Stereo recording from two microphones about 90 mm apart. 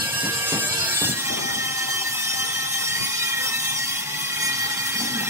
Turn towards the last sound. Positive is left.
turn(degrees=-30)  # may be behind; listen again after turning